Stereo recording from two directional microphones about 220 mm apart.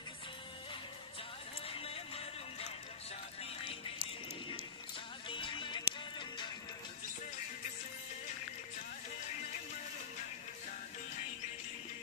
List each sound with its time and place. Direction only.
1.6 s music: 25° left (ahead or behind)
5.3 s music: 20° left (ahead or behind)